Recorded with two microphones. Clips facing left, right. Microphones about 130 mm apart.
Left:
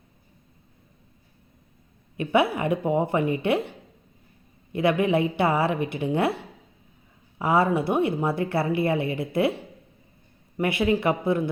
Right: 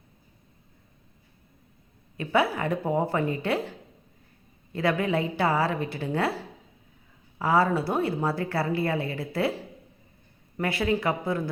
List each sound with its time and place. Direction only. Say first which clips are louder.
2.1 s a woman's voice: left 3 dB; 20° left (ahead or behind)
10.6 s a woman's voice: left 3 dB; 20° left (ahead or behind)